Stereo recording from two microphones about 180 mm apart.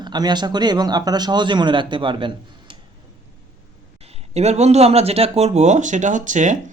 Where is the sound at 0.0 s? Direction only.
25° right (ahead or behind).